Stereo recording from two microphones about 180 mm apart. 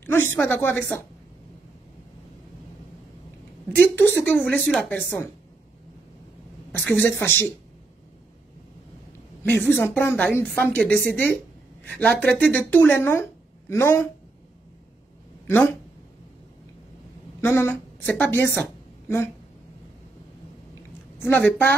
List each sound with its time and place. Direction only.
0.0 s a woman's voice: 15° left (ahead or behind)
3.7 s a woman's voice: 10° left (ahead or behind)
6.9 s a woman's voice: 10° left (ahead or behind)
9.4 s a woman's voice: 10° left (ahead or behind)
15.4 s speech: 10° left (ahead or behind)
17.4 s a woman's voice: 15° left (ahead or behind)
21.2 s a woman's voice: 10° left (ahead or behind)